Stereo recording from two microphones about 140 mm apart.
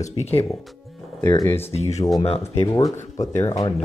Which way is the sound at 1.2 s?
20° left (ahead or behind).